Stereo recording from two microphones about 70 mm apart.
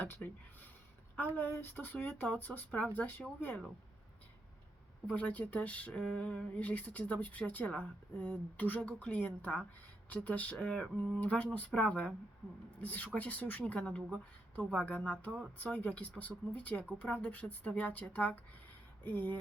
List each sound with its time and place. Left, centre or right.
0.0 s a sound: left
1.4 s speech: left
2.2 s speech: centre
5.0 s speech: centre